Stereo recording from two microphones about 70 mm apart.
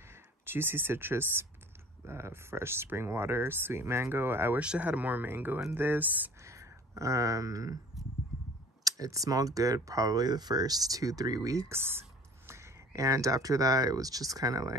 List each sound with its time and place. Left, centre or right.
0.1 s speech: right
4.6 s speech: centre
6.4 s speech: right
8.8 s speech: right
10.2 s speech: right
11.7 s speech: right